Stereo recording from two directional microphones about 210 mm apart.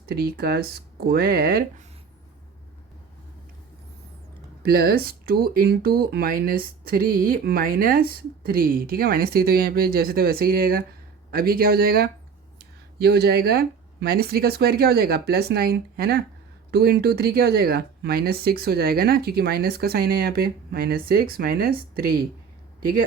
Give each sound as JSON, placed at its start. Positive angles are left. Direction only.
{"t": 0.1, "sound": "speech", "side_deg": -45}
{"t": 4.6, "sound": "speech", "side_deg": -45}